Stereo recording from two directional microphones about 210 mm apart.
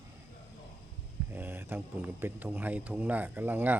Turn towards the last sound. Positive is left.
turn(degrees=-10)  # may be behind; listen again after turning